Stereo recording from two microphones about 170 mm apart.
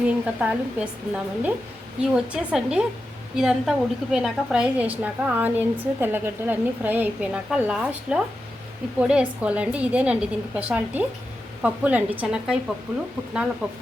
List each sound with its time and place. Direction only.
0.1 s a woman's voice: 5° right (ahead or behind)
13.6 s a woman's voice: 10° right (ahead or behind)